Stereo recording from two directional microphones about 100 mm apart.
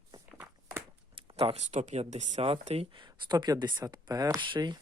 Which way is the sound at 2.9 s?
50° right (ahead or behind).